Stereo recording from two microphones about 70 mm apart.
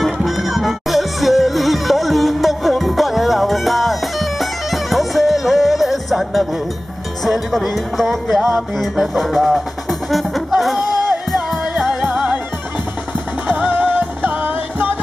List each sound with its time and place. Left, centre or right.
0.0 s music: centre
12.0 s music: centre
13.5 s music: right